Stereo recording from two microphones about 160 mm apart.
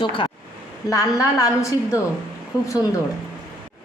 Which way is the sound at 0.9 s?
20° left (ahead or behind).